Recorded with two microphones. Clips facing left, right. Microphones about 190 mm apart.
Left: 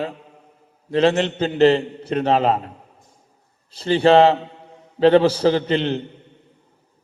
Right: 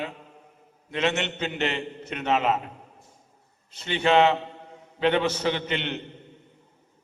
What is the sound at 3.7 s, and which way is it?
Mantra, 35° left (ahead or behind).